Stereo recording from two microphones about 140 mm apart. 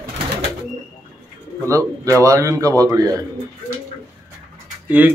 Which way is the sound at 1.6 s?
20° right (ahead or behind).